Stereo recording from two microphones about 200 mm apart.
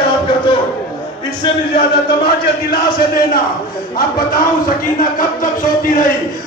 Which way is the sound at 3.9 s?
50° left (ahead or behind).